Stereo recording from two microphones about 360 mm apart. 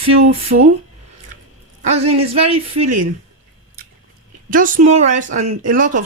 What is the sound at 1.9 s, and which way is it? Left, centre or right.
Speech, centre.